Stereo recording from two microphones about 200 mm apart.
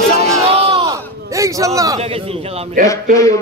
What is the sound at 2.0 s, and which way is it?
Speech, 30° right (ahead or behind).